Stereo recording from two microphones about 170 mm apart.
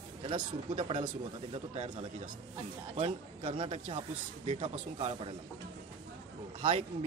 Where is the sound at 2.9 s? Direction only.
35° right (ahead or behind).